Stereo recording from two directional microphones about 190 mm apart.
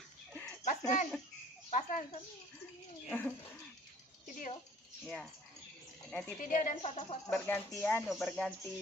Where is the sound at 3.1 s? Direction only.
10° left (ahead or behind).